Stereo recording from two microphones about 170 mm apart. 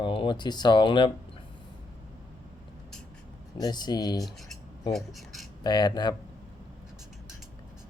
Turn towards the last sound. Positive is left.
turn(degrees=25)  # may be behind; listen again after turning